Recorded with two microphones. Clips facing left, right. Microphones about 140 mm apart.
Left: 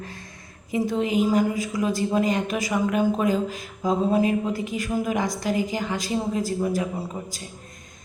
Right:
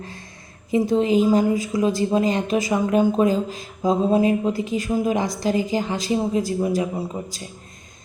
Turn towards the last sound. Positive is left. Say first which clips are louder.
# right 3 dB
turn(degrees=-20)  # may be behind; listen again after turning